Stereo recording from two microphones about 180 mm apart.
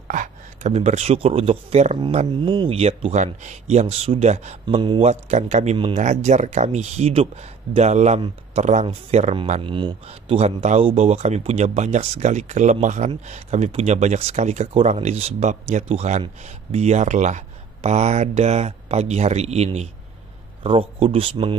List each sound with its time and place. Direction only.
0.1 s speech: 40° right (ahead or behind)